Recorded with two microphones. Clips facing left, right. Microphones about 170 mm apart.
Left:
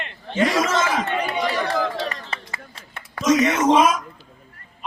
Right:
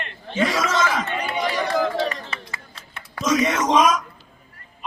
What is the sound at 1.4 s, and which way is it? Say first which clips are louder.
Chatter: right 3 dB; 5° right (ahead or behind).